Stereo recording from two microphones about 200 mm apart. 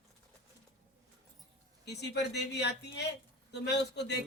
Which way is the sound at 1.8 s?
55° left (ahead or behind).